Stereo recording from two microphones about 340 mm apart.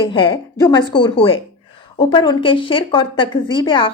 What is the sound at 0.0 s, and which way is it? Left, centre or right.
A woman's voice, centre.